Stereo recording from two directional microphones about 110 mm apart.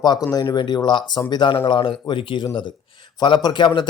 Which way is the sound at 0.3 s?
30° left (ahead or behind).